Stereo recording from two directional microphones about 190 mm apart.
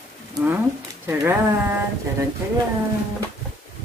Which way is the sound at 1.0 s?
10° right (ahead or behind).